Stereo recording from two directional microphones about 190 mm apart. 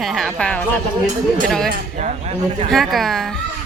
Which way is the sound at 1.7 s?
40° right (ahead or behind).